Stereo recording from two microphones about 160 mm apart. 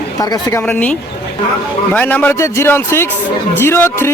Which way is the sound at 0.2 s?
25° left (ahead or behind).